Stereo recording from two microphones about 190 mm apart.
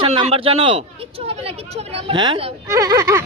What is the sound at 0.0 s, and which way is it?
Speech, 30° right (ahead or behind).